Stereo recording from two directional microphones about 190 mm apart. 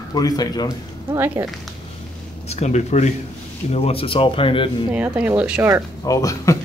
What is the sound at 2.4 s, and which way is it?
Speech, 35° left (ahead or behind).